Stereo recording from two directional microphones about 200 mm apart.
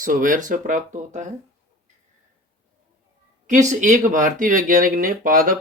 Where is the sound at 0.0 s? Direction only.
40° right (ahead or behind).